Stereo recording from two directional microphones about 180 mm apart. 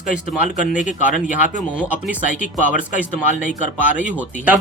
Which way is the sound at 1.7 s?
5° right (ahead or behind).